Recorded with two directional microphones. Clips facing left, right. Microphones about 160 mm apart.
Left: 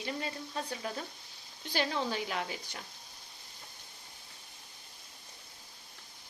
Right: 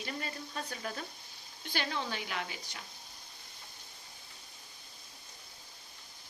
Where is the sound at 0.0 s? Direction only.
20° left (ahead or behind).